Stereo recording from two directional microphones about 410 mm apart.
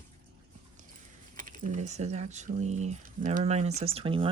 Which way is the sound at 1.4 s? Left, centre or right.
Centre.